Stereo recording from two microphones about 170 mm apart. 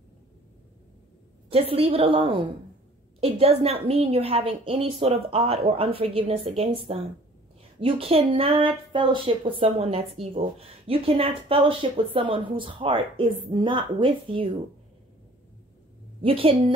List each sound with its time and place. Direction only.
1.5 s a woman's voice: 35° right (ahead or behind)
16.2 s a woman's voice: 35° right (ahead or behind)